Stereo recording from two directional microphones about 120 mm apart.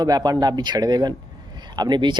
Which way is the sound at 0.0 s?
35° right (ahead or behind).